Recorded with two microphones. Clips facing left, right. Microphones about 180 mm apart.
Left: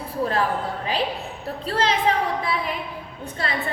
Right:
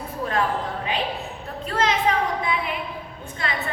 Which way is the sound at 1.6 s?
30° left (ahead or behind).